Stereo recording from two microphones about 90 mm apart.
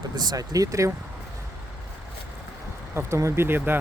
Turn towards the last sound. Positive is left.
turn(degrees=-25)  # may be behind; listen again after turning